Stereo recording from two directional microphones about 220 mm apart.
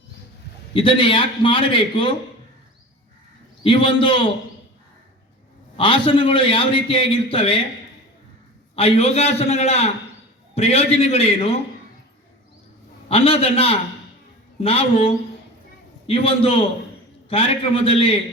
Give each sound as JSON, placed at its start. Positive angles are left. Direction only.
{"t": 0.7, "sound": "a man's voice", "side_deg": 25}
{"t": 3.6, "sound": "a man's voice", "side_deg": 25}
{"t": 5.7, "sound": "a man's voice", "side_deg": 25}
{"t": 8.7, "sound": "a man's voice", "side_deg": 30}
{"t": 13.1, "sound": "a man's voice", "side_deg": 25}